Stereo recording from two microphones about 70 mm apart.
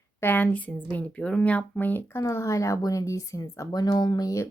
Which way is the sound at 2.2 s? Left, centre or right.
Left.